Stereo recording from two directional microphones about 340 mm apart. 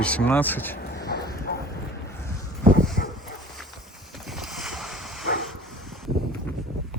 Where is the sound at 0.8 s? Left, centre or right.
Left.